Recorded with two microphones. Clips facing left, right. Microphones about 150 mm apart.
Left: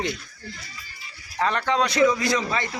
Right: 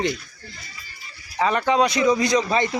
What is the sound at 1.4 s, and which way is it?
A man's voice, 10° right (ahead or behind).